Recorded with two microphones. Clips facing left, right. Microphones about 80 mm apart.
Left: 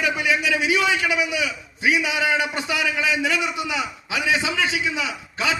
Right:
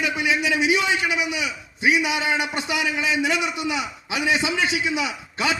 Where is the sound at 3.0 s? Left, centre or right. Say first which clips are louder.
Even; right.